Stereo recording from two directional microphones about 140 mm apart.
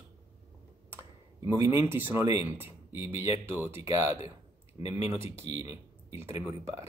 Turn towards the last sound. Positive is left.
turn(degrees=-20)  # may be behind; listen again after turning